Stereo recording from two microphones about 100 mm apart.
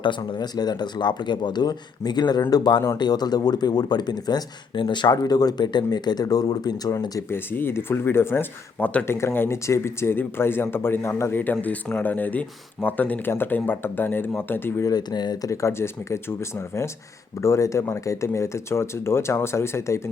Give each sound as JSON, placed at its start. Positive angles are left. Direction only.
{"t": 0.0, "sound": "speech", "side_deg": 50}
{"t": 7.3, "sound": "speech", "side_deg": 20}
{"t": 9.0, "sound": "speech", "side_deg": 25}
{"t": 14.8, "sound": "speech", "side_deg": 45}